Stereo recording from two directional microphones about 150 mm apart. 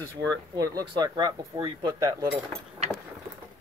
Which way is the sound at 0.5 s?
25° right (ahead or behind).